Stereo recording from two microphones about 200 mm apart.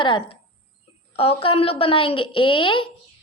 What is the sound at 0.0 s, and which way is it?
A woman's voice, 25° left (ahead or behind).